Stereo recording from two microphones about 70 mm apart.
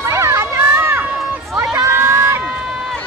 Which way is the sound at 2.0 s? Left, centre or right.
Right.